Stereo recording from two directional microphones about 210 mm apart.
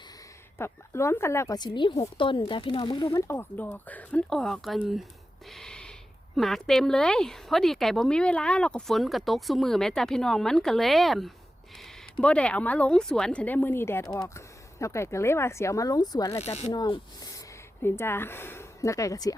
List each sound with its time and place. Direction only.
0.6 s speech: 10° left (ahead or behind)
5.5 s gasp: centre (ahead or behind)
6.3 s speech: centre (ahead or behind); by 19.3 s 15° left (ahead or behind)